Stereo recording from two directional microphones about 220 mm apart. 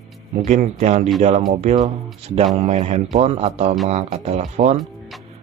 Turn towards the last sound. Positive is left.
turn(degrees=-30)  # may be behind; listen again after turning